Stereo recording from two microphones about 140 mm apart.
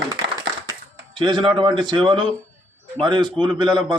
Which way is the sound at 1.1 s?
35° right (ahead or behind).